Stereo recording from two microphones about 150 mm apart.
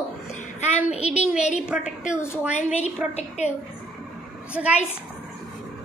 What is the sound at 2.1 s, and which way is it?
Speech, 15° left (ahead or behind).